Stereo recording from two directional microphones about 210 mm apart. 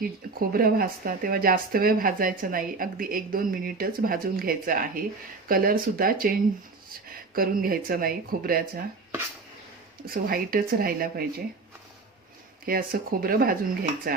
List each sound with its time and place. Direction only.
0.0 s speech: 45° right (ahead or behind)
7.3 s speech: 45° right (ahead or behind)
10.1 s speech: 45° right (ahead or behind)
12.6 s speech: 45° right (ahead or behind)